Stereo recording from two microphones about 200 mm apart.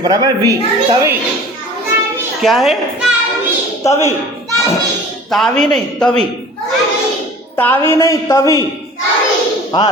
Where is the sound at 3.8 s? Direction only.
30° left (ahead or behind).